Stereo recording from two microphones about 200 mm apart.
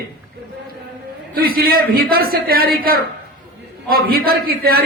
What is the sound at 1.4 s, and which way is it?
A man's voice, 50° right (ahead or behind).